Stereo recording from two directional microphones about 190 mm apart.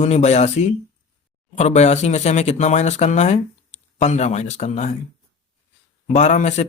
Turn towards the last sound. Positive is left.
turn(degrees=40)  # may be behind; listen again after turning